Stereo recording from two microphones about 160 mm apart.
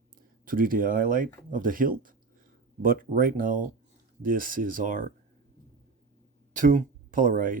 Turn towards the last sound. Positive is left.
turn(degrees=-55)  # may be behind; listen again after turning